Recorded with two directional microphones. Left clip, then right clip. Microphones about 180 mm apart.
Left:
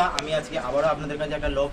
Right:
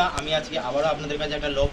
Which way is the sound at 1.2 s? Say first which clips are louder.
Right 1 dB; 5° left (ahead or behind).